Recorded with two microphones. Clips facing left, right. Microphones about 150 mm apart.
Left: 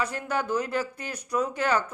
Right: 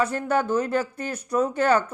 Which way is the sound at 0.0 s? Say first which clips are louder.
Right 6 dB; 30° right (ahead or behind).